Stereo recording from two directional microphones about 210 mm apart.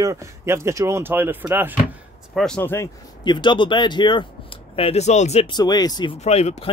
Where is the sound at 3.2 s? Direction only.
20° left (ahead or behind).